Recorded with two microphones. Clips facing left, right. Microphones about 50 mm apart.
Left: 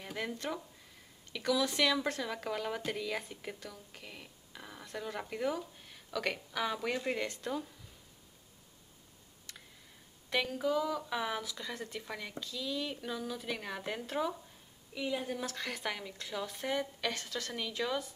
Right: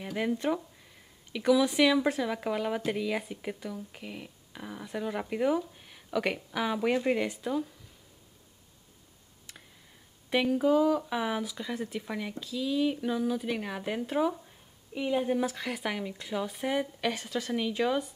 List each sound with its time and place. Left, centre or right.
0.0 s speech: centre
10.3 s speech: centre
15.0 s a woman's voice: right
15.4 s speech: centre